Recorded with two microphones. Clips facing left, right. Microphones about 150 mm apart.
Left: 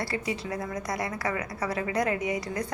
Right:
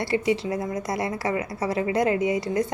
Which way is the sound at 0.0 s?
25° right (ahead or behind).